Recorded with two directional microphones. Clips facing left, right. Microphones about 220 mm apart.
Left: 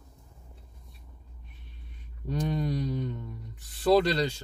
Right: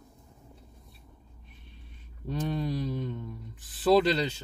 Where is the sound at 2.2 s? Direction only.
Centre (ahead or behind).